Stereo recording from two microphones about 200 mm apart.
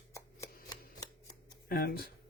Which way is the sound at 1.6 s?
50° left (ahead or behind).